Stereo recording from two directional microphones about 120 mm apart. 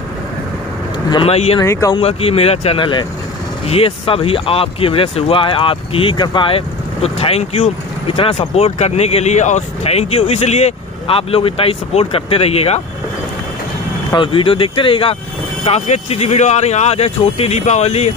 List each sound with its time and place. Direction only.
1.2 s speech: 55° left (ahead or behind)
1.6 s speech: 25° left (ahead or behind)
2.0 s speech: 55° left (ahead or behind)
8.4 s speech: 60° left (ahead or behind)
14.1 s speech: 45° left (ahead or behind)
15.6 s speech: 60° left (ahead or behind)